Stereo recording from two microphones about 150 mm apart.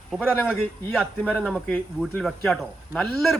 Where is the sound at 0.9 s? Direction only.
5° left (ahead or behind).